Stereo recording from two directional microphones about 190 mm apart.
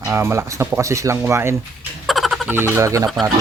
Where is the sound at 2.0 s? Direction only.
Centre (ahead or behind).